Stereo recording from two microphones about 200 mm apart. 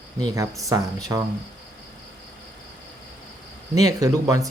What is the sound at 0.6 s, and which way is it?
Speech, 15° right (ahead or behind).